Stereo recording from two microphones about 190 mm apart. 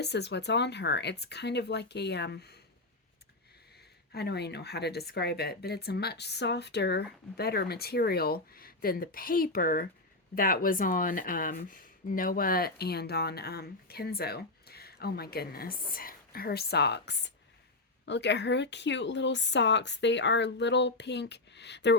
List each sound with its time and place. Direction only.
0.0 s speech: 65° left (ahead or behind)
4.1 s speech: 60° left (ahead or behind)